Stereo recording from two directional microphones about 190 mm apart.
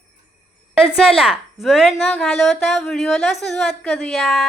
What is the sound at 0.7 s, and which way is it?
A woman's voice, 5° right (ahead or behind).